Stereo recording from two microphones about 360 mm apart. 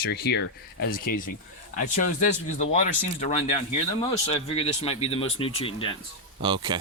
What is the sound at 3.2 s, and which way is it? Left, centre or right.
Speech, centre.